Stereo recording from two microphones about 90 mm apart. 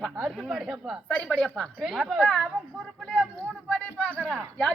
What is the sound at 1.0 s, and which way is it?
Speech, 15° left (ahead or behind).